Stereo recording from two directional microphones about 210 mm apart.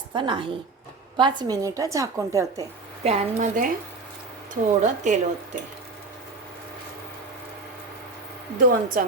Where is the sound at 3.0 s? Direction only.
30° right (ahead or behind).